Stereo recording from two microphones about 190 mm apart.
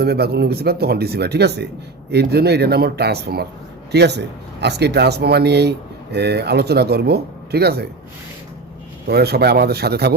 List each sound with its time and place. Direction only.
0.0 s speech: 55° right (ahead or behind)
9.0 s speech: 60° right (ahead or behind)